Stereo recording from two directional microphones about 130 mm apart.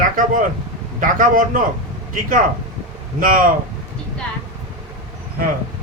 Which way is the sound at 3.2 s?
90° right.